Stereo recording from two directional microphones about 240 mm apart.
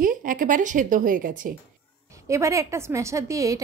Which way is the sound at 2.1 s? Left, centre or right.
Centre.